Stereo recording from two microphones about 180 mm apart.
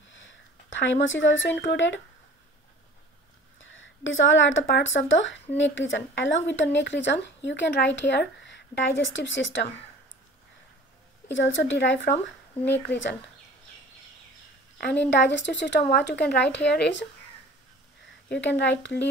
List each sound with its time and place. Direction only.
0.1 s a sound: 90° left
1.0 s speech: 90° left
3.5 s speech: 90° left
11.2 s speech: 85° left
15.0 s speech: 80° left
18.3 s speech: 75° left (ahead or behind)